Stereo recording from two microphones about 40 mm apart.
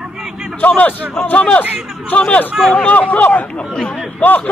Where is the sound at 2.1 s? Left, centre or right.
Left.